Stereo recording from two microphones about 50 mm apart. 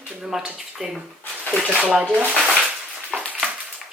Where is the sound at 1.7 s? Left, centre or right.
Right.